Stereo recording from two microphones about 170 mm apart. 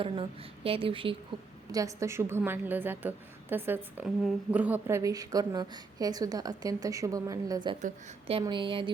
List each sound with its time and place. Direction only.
0.0 s a woman's voice: 30° right (ahead or behind)
1.7 s a woman's voice: 20° right (ahead or behind)
4.0 s a woman's voice: centre (ahead or behind); by 7.8 s 25° right (ahead or behind)
7.8 s a woman's voice: 45° right (ahead or behind)
8.3 s a woman's voice: 30° right (ahead or behind)